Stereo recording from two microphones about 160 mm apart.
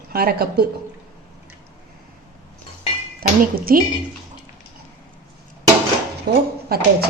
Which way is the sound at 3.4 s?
65° right (ahead or behind).